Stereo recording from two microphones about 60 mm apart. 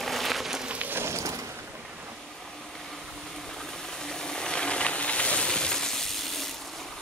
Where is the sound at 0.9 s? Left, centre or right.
Right.